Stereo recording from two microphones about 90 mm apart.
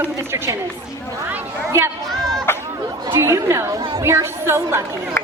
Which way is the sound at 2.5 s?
25° left (ahead or behind).